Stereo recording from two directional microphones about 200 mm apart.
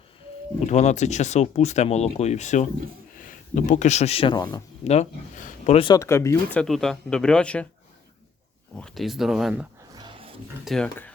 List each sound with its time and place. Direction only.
0.7 s speech: 35° left (ahead or behind)
4.8 s speech: 35° left (ahead or behind)
5.9 s speech: 15° left (ahead or behind)
8.7 s speech: centre (ahead or behind)
9.9 s dog: 20° right (ahead or behind)
10.7 s speech: 5° left (ahead or behind)